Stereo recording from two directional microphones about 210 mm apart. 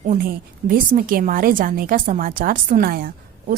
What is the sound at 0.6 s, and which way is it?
A woman's voice, 35° right (ahead or behind).